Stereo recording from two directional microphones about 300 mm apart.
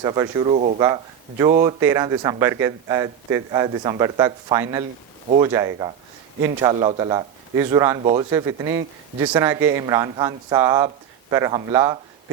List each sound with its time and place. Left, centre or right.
0.0 s a man's voice: centre